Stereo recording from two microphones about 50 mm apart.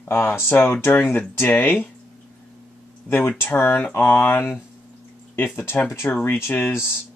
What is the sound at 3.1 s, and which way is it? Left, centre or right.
Speech, left.